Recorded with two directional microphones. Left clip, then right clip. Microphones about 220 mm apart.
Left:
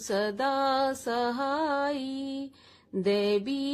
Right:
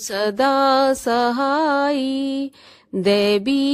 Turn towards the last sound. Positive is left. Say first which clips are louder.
# right 10 dB
turn(degrees=-35)  # may be behind; listen again after turning